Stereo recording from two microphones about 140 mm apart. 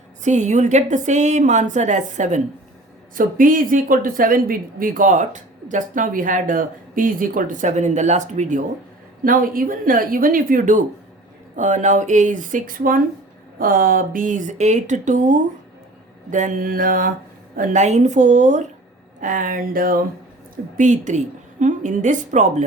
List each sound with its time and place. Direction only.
0.2 s a woman's voice: 55° right (ahead or behind)
3.2 s speech: 75° right (ahead or behind)
9.2 s a woman's voice: 85° right
11.5 s a woman's voice: 60° right (ahead or behind); by 17.1 s 80° right
17.6 s a woman's voice: 60° right (ahead or behind)
19.2 s a woman's voice: 70° right (ahead or behind); by 20.1 s 90° right
20.7 s a woman's voice: 60° right (ahead or behind)